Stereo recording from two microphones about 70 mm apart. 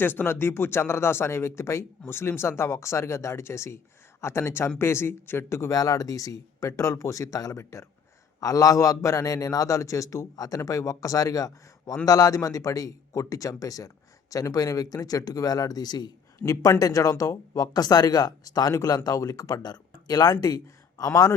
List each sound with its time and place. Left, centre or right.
0.0 s speech: left
8.4 s a man's voice: left
16.5 s a man's voice: left